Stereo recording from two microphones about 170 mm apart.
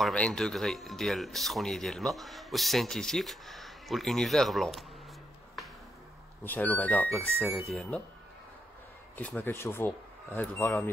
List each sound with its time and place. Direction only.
0.0 s speech: 5° left (ahead or behind)
6.4 s speech: 10° left (ahead or behind)
9.1 s speech: 10° left (ahead or behind)